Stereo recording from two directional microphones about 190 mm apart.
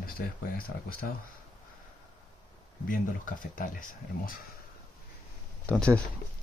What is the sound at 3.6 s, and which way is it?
Speech, 45° left (ahead or behind).